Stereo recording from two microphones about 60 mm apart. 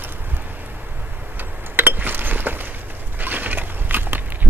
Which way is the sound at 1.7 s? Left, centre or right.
Right.